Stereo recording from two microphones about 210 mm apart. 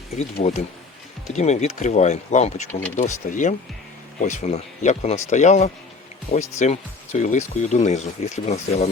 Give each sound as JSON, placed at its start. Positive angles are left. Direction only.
{"t": 0.4, "sound": "speech", "side_deg": 35}